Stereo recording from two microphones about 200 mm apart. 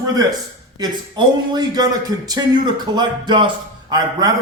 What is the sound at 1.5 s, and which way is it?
A man's voice, 20° right (ahead or behind).